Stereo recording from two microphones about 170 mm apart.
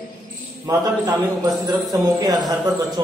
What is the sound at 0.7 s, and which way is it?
A man's voice, 20° right (ahead or behind).